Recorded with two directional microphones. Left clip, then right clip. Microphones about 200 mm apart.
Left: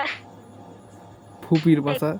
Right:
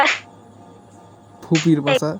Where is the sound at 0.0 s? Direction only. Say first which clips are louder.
Right 11 dB; 45° right (ahead or behind).